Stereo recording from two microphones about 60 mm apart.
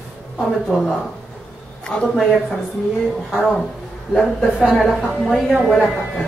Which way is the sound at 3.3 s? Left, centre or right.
Centre.